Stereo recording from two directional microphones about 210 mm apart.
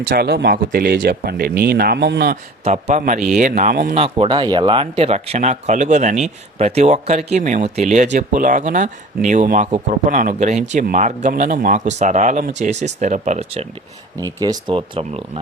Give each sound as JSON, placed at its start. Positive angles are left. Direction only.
{"t": 0.0, "sound": "speech", "side_deg": -50}
{"t": 2.6, "sound": "speech", "side_deg": -30}
{"t": 3.9, "sound": "speech", "side_deg": -25}
{"t": 14.3, "sound": "speech", "side_deg": -20}